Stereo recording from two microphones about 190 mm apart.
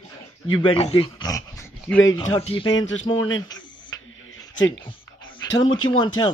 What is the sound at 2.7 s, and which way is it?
Speech, 90° left.